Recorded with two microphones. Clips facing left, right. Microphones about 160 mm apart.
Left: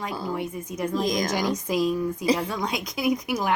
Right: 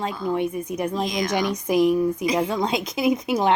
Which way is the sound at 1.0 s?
45° left (ahead or behind).